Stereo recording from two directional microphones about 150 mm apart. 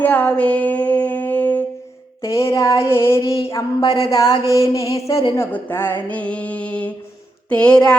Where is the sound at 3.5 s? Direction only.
25° left (ahead or behind).